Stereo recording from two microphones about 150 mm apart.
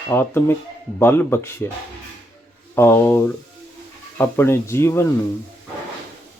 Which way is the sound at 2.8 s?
15° left (ahead or behind).